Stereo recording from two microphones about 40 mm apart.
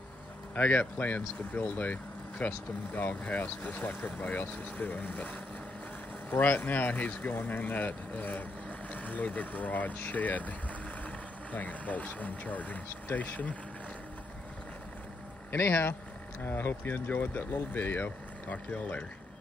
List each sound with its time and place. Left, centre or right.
0.6 s speech: left
2.9 s speech: left
3.3 s speech: left
6.3 s speech: left
11.5 s speech: left
15.5 s speech: left
17.1 s speech: left
18.7 s speech: left